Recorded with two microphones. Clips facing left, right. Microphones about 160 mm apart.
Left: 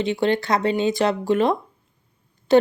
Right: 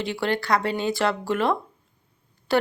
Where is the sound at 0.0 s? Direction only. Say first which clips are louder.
Left 5 dB; 20° left (ahead or behind).